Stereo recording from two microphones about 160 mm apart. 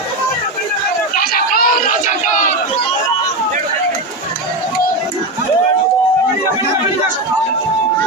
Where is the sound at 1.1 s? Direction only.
65° left (ahead or behind).